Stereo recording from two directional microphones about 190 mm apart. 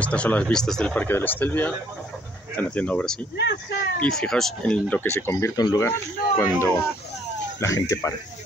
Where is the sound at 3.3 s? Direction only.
65° left (ahead or behind).